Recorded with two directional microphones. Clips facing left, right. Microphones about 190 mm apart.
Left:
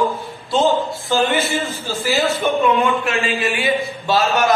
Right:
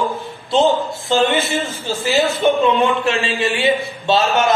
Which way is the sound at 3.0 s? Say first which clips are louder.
Right 2 dB; 30° right (ahead or behind).